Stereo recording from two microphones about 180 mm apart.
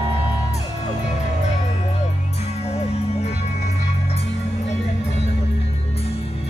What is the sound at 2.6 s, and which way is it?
Music, 35° left (ahead or behind).